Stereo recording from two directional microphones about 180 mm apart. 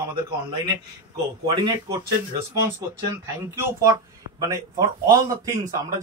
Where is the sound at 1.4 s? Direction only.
25° right (ahead or behind).